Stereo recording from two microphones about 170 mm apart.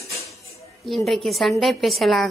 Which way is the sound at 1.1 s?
Centre (ahead or behind).